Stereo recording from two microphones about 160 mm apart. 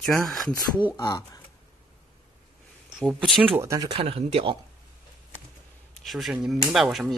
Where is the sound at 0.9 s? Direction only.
20° left (ahead or behind).